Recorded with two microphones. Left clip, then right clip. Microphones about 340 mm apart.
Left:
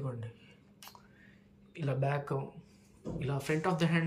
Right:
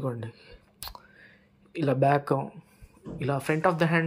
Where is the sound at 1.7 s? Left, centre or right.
Centre.